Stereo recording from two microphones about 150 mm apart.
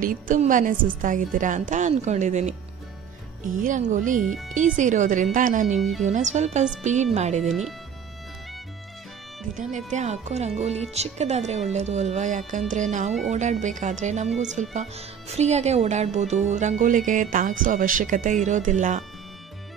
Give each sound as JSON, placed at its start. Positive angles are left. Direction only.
{"t": 0.0, "sound": "a woman's voice", "side_deg": -70}
{"t": 0.4, "sound": "a woman's voice", "side_deg": -60}
{"t": 3.5, "sound": "a woman's voice", "side_deg": -60}
{"t": 4.3, "sound": "speech", "side_deg": 0}
{"t": 4.6, "sound": "a woman's voice", "side_deg": -55}
{"t": 5.8, "sound": "speech", "side_deg": 0}
{"t": 6.0, "sound": "speech", "side_deg": -50}
{"t": 9.6, "sound": "speech", "side_deg": -55}